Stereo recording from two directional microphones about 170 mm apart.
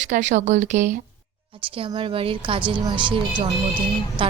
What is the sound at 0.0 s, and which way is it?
Speech, 45° right (ahead or behind).